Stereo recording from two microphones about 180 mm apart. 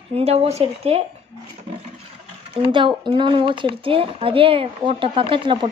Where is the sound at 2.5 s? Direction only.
30° right (ahead or behind).